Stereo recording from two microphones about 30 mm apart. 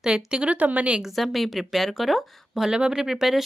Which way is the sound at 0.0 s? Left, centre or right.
Right.